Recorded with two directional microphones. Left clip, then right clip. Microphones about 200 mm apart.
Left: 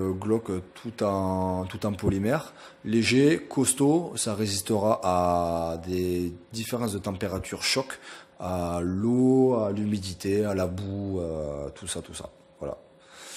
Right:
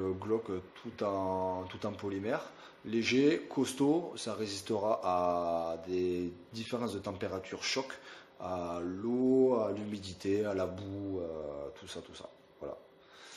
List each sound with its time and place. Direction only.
0.0 s speech: 35° left (ahead or behind)